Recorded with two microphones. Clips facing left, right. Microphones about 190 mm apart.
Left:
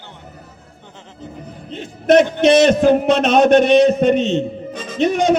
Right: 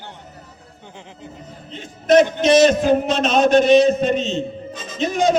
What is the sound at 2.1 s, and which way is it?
A man's voice, 60° left (ahead or behind).